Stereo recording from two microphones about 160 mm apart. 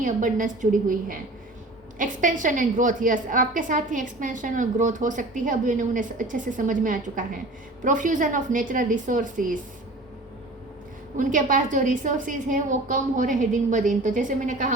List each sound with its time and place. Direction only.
0.0 s a woman's voice: 55° right (ahead or behind)
11.2 s a woman's voice: 55° right (ahead or behind)